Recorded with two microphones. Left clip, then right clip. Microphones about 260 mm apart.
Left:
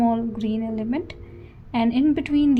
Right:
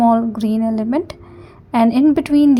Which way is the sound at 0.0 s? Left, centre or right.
Right.